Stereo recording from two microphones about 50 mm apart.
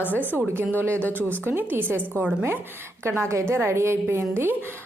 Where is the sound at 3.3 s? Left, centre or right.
Right.